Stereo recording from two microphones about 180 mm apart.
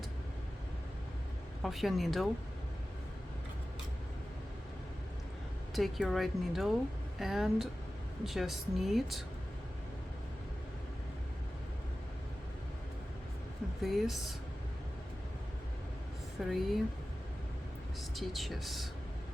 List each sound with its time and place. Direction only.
1.6 s speech: centre (ahead or behind)
5.7 s speech: centre (ahead or behind)
13.8 s speech: centre (ahead or behind)
16.5 s speech: centre (ahead or behind)
18.2 s speech: centre (ahead or behind)